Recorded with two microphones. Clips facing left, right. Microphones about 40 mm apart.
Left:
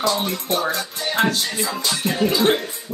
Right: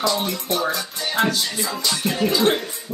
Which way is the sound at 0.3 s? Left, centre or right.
Left.